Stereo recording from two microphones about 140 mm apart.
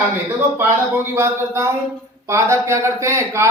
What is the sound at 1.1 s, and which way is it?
Speech, 20° right (ahead or behind).